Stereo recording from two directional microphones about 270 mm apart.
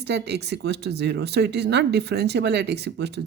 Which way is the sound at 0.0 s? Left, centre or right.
Right.